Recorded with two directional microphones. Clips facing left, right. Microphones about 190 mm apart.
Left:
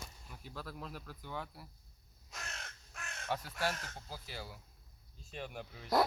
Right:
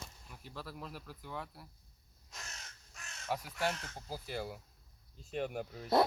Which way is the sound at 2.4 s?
60° left (ahead or behind).